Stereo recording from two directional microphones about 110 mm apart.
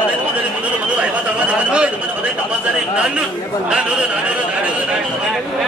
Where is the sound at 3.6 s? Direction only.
10° right (ahead or behind).